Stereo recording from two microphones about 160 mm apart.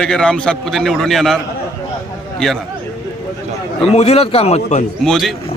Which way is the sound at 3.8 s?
40° left (ahead or behind).